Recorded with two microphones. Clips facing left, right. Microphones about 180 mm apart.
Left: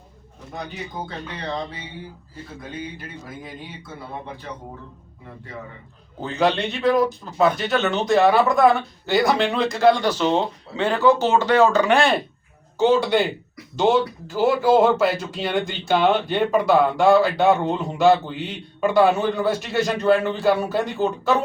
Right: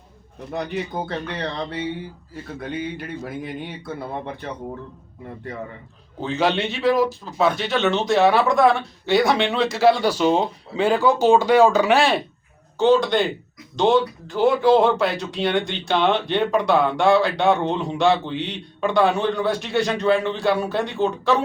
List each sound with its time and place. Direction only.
0.5 s speech: 70° right (ahead or behind)
6.1 s speech: centre (ahead or behind)
12.8 s speech: 10° left (ahead or behind)